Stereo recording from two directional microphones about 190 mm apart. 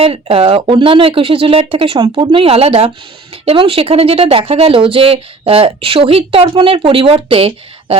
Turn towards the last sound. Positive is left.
turn(degrees=-30)  # may be behind; listen again after turning